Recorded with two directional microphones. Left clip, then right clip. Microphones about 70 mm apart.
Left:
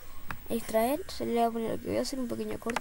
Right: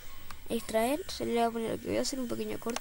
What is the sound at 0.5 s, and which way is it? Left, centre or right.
Speech, centre.